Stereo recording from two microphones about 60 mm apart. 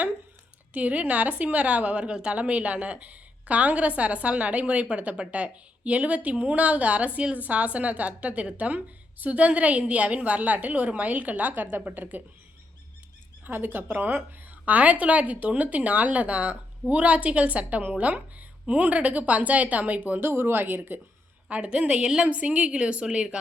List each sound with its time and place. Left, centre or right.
0.7 s a woman's voice: right
13.4 s a woman's voice: right
20.1 s speech: right
21.5 s a woman's voice: centre